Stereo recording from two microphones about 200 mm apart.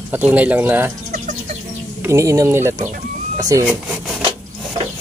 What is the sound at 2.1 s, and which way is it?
Speech, 15° right (ahead or behind).